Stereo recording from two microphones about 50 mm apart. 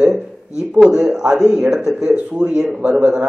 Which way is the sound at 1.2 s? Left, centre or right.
Centre.